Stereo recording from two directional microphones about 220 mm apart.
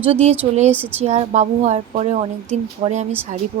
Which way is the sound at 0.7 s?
10° right (ahead or behind).